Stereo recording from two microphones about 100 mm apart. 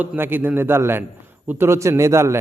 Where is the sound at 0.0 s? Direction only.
20° right (ahead or behind).